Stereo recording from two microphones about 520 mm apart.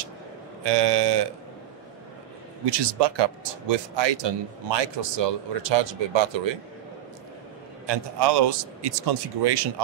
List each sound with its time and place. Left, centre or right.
0.7 s speech: right
2.6 s speech: right
7.8 s speech: right